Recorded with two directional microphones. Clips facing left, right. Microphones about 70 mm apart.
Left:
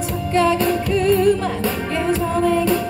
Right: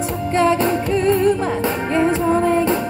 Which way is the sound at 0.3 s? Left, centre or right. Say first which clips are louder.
Right 1 dB; right.